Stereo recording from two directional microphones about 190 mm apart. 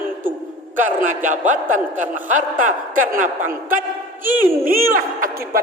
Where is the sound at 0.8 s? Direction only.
45° right (ahead or behind).